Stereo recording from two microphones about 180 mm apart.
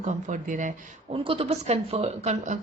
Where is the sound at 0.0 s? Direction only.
40° right (ahead or behind).